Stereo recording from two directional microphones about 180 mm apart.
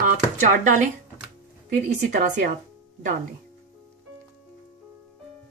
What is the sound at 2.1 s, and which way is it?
Speech, 45° right (ahead or behind).